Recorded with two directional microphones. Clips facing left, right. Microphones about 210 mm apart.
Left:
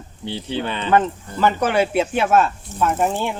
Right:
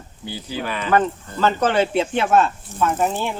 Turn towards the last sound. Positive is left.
turn(degrees=10)  # may be behind; listen again after turning